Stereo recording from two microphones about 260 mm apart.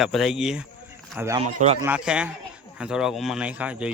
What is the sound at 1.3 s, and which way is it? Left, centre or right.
Speech, right.